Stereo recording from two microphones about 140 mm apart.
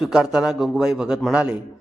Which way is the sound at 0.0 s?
5° right (ahead or behind).